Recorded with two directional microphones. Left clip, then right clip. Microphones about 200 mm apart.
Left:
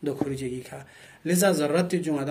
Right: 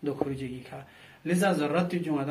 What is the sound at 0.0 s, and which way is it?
Speech, 45° left (ahead or behind).